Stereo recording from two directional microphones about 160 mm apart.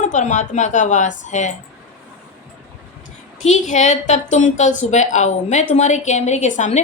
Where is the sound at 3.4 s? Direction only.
50° left (ahead or behind).